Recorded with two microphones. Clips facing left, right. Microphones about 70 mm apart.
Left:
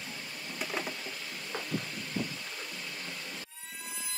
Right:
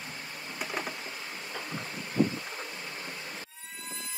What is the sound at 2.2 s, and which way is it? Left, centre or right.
Vehicle, right.